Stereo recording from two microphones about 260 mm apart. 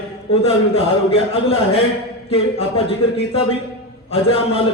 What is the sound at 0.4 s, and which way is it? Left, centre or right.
A man's voice, left.